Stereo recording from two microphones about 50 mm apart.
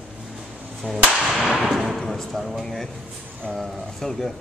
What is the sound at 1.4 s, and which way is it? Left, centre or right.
Whip, centre.